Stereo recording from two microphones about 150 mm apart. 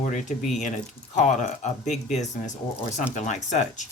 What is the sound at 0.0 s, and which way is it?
Speech, 55° left (ahead or behind).